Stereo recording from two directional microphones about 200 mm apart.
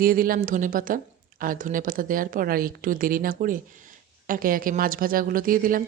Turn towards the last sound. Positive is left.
turn(degrees=-45)  # may be behind; listen again after turning